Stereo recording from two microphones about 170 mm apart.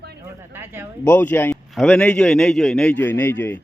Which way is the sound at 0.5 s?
15° right (ahead or behind).